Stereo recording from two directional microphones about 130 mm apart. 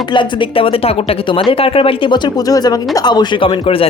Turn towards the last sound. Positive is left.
turn(degrees=45)  # may be behind; listen again after turning